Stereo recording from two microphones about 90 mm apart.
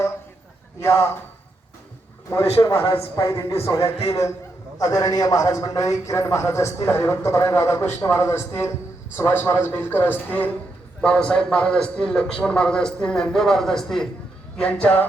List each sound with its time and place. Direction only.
0.8 s a man's voice: 35° left (ahead or behind)
2.3 s a man's voice: 35° left (ahead or behind); by 15.0 s 15° left (ahead or behind)